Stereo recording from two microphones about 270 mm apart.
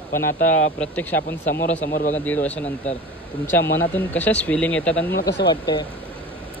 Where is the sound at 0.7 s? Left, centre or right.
Centre.